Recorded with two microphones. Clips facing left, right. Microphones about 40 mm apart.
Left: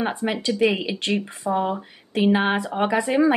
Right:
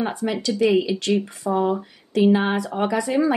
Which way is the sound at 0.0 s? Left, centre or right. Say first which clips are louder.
Even; left.